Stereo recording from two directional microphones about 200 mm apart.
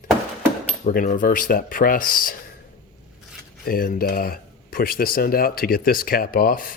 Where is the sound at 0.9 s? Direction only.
45° left (ahead or behind).